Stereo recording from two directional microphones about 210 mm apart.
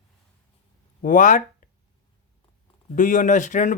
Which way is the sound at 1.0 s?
40° left (ahead or behind).